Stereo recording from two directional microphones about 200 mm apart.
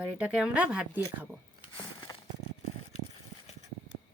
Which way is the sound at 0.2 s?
5° right (ahead or behind).